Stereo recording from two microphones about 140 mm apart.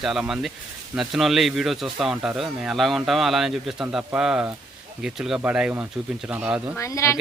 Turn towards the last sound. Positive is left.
turn(degrees=20)  # may be behind; listen again after turning